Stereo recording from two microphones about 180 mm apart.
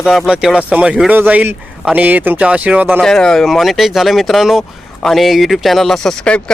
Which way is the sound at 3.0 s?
5° left (ahead or behind).